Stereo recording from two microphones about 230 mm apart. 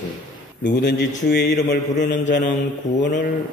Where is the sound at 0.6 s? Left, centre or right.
Left.